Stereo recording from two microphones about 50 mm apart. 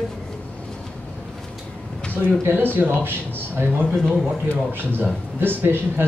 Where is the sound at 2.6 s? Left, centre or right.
Right.